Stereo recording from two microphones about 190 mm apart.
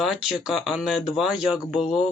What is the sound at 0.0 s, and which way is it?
Speech, centre (ahead or behind).